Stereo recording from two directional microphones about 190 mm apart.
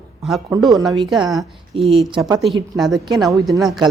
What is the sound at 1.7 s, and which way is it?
Speech, 30° right (ahead or behind).